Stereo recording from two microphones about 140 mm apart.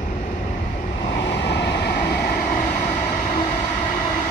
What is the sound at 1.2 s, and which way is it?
Vehicle, 35° left (ahead or behind).